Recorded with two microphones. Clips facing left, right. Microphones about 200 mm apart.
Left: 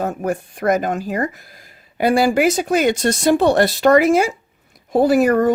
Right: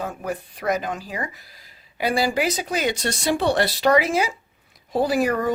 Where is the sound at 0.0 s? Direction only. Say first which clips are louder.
Left 7 dB; 50° left (ahead or behind).